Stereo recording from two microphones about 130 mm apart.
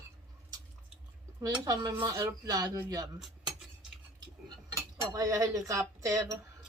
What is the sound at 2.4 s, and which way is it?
A woman's voice, 25° right (ahead or behind).